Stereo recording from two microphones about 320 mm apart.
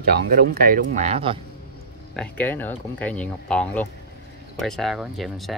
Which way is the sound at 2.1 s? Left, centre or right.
Centre.